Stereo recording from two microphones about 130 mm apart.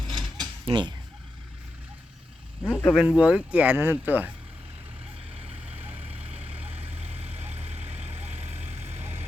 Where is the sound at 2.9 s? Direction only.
5° right (ahead or behind).